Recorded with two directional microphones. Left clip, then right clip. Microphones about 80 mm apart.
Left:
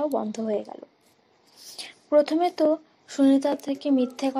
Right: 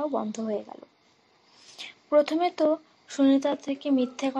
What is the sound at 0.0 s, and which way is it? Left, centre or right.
Speech, left.